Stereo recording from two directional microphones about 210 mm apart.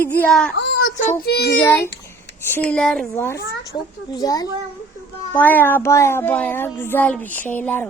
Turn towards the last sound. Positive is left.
turn(degrees=10)  # may be behind; listen again after turning